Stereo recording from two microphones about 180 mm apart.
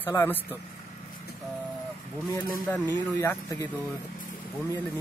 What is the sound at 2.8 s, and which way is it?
Speech, 15° left (ahead or behind).